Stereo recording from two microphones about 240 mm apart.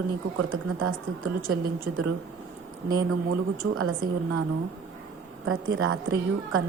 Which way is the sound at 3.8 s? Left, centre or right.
Right.